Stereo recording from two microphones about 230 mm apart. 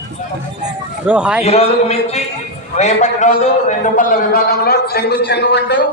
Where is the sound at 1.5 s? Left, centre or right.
Left.